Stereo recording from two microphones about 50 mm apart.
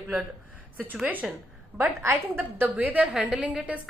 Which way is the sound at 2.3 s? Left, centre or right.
Right.